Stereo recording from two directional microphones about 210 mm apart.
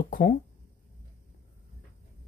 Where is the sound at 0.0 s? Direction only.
40° left (ahead or behind).